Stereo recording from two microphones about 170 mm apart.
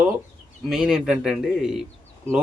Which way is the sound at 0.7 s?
5° right (ahead or behind).